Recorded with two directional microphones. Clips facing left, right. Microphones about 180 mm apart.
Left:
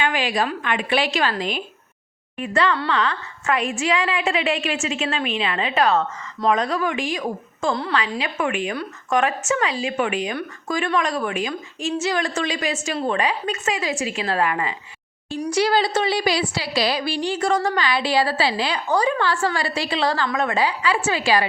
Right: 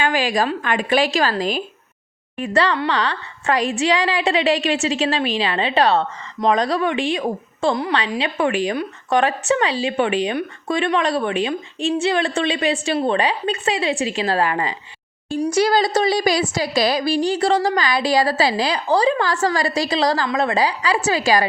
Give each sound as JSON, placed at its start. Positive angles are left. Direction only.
{"t": 0.0, "sound": "a woman's voice", "side_deg": -45}
{"t": 15.4, "sound": "a woman's voice", "side_deg": -45}